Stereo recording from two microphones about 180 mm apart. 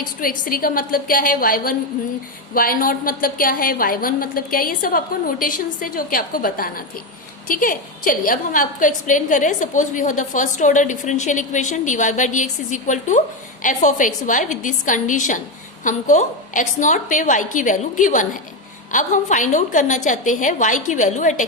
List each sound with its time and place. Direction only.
0.2 s a woman's voice: 50° left (ahead or behind)